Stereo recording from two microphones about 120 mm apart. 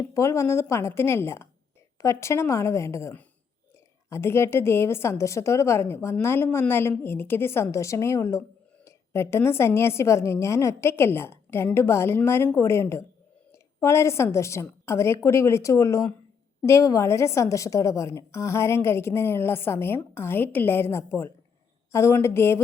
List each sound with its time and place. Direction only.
0.1 s a woman's voice: 25° left (ahead or behind)